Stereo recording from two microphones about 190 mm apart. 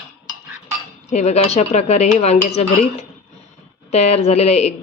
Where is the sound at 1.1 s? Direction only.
35° left (ahead or behind).